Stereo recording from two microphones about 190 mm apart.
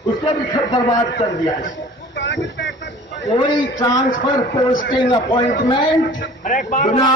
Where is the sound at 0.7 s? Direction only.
20° left (ahead or behind).